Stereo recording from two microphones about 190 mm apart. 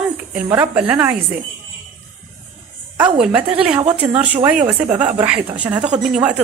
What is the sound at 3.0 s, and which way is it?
Speech, 5° right (ahead or behind).